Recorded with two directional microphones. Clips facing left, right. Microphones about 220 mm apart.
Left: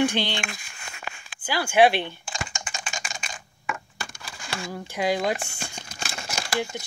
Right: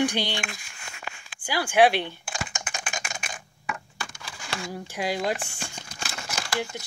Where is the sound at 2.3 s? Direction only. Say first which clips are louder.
Even; 60° right (ahead or behind).